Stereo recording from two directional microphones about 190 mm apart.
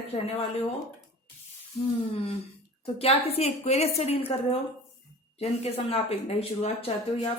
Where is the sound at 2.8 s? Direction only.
30° left (ahead or behind).